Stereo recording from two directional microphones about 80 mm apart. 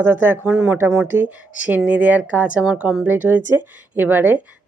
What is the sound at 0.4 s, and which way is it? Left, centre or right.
A woman's voice, centre.